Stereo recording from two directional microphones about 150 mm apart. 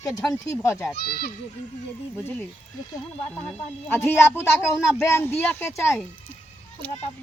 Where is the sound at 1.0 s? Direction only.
90° left.